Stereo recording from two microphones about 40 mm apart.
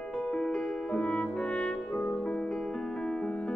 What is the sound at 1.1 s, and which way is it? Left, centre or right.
Music, left.